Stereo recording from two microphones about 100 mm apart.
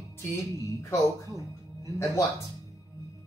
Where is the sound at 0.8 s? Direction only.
30° left (ahead or behind).